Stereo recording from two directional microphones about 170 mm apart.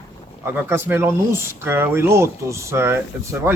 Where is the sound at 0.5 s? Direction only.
15° right (ahead or behind).